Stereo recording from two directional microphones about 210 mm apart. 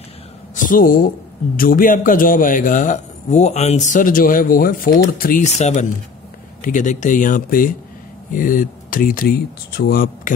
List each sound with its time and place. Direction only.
0.7 s a man's voice: 40° left (ahead or behind)